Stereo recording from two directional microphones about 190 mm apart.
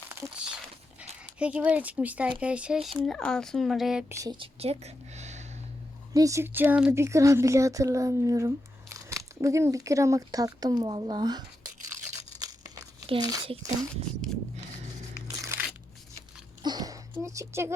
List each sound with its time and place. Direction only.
0.1 s crumpling: 10° right (ahead or behind)
1.4 s speech: 5° right (ahead or behind)
4.1 s speech: 20° right (ahead or behind); by 5.5 s 35° right (ahead or behind)
6.1 s speech: 15° right (ahead or behind)
12.4 s crumpling: 20° right (ahead or behind)
13.2 s speech: 25° right (ahead or behind)
15.4 s crunch: 10° right (ahead or behind)
16.6 s a sound: 20° right (ahead or behind)